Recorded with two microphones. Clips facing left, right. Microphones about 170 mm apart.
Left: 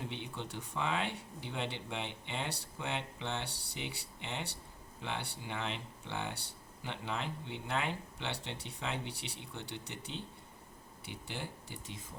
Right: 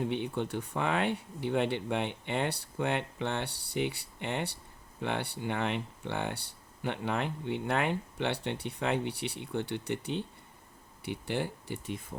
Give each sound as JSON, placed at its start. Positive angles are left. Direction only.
{"t": 0.1, "sound": "speech", "side_deg": -55}